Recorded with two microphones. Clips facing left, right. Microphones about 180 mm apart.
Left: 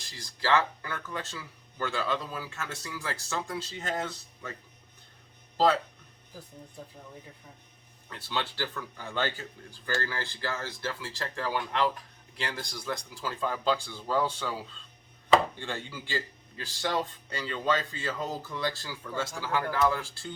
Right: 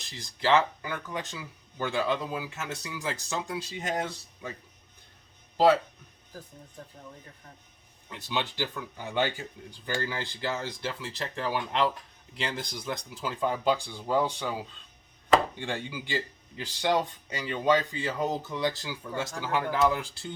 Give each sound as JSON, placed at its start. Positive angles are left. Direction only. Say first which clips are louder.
{"t": 0.0, "sound": "speech", "louder": "right 4 dB", "side_deg": -20}
{"t": 8.1, "sound": "speech", "louder": "right 2 dB", "side_deg": -15}
{"t": 15.5, "sound": "speech", "louder": "right 3 dB", "side_deg": -15}